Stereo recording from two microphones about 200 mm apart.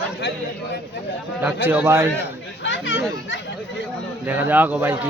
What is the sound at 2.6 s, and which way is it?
Speech, 65° left (ahead or behind).